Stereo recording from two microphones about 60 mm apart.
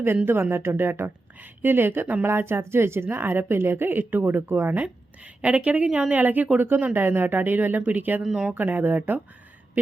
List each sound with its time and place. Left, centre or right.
0.5 s a woman's voice: right
4.7 s a woman's voice: right
8.2 s speech: centre
8.5 s a woman's voice: right